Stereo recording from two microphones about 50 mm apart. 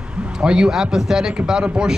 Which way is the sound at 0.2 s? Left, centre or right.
Centre.